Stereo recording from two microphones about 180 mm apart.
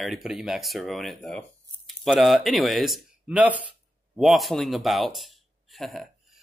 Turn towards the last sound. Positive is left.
turn(degrees=0)  # may be behind; listen again after turning